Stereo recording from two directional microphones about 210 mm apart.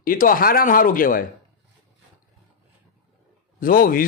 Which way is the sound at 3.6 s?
40° left (ahead or behind).